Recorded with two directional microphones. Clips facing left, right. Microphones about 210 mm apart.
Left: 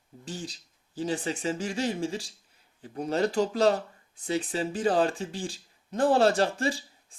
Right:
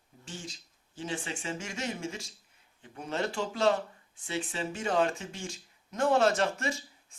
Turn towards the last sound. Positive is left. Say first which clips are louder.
# left 5 dB
turn(degrees=30)  # may be behind; listen again after turning